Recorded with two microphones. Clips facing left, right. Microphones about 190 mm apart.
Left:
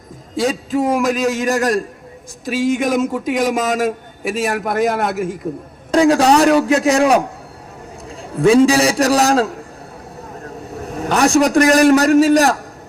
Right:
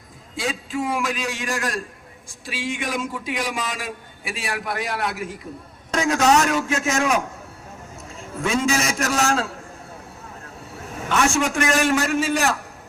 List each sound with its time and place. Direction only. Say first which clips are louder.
0.3 s a man's voice: left 9 dB; 40° left (ahead or behind)
5.9 s a man's voice: left 7 dB; 35° left (ahead or behind)
10.8 s a man's voice: left 6 dB; 35° left (ahead or behind)